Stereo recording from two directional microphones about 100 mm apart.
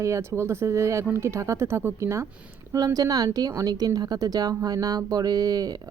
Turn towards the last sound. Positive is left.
turn(degrees=-40)  # may be behind; listen again after turning